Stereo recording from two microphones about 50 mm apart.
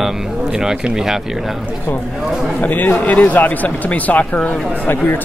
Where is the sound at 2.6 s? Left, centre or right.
Left.